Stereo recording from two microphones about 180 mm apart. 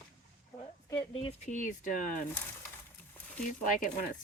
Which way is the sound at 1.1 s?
40° left (ahead or behind).